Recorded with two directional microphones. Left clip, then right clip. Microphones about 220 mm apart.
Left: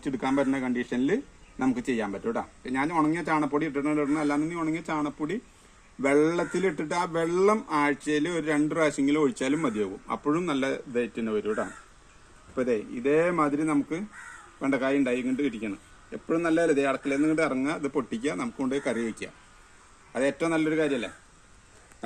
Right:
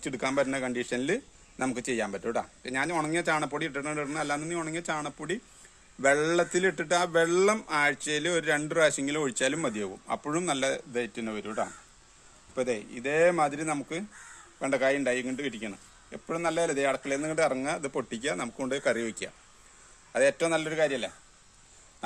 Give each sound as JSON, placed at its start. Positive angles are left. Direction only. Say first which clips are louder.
{"t": 0.0, "sound": "a man's voice", "louder": "left 1 dB", "side_deg": -55}